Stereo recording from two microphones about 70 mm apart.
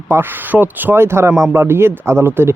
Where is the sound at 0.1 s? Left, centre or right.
Right.